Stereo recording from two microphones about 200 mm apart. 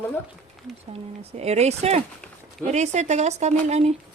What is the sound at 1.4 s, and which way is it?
Speech, 30° right (ahead or behind).